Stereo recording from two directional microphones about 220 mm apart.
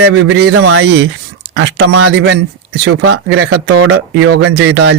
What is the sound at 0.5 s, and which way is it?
Speech, 80° right.